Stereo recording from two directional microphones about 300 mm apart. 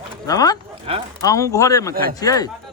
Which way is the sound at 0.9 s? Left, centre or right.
Centre.